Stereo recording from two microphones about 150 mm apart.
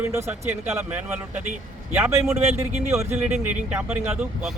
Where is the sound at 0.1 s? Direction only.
15° right (ahead or behind).